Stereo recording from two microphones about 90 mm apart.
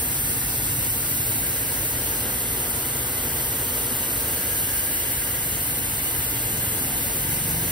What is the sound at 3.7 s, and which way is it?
Engine, 60° right (ahead or behind).